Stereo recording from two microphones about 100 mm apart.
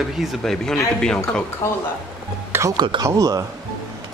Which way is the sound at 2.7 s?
50° right (ahead or behind).